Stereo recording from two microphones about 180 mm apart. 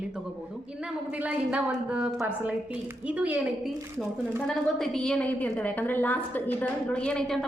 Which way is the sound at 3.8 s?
15° right (ahead or behind).